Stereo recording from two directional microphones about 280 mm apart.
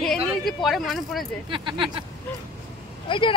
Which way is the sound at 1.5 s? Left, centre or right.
Centre.